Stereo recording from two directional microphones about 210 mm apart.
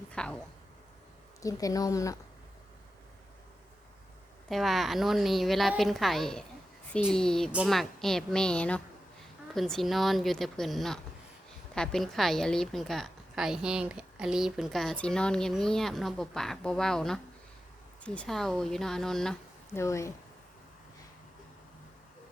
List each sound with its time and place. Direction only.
0.1 s a sound: 5° left (ahead or behind)
1.4 s speech: 15° left (ahead or behind)
4.4 s a woman's voice: centre (ahead or behind)
19.8 s speech: 15° left (ahead or behind)